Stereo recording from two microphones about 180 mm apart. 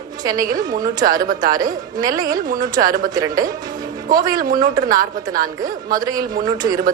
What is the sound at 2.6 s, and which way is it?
Speech, 20° right (ahead or behind).